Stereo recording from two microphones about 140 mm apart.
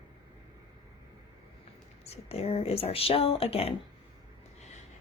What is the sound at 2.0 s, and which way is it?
A woman's voice, 45° left (ahead or behind).